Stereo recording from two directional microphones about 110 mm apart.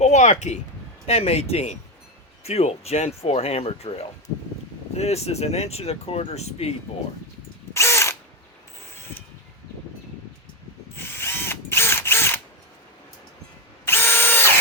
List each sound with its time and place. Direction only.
0.0 s speech: 90° left
1.0 s speech: 65° left (ahead or behind)
7.7 s drill: 25° left (ahead or behind)
10.9 s ratchet: 20° left (ahead or behind)
13.8 s drill: 20° left (ahead or behind)